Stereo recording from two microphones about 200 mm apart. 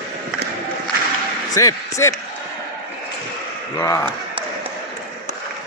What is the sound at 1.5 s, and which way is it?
Speech, 15° left (ahead or behind).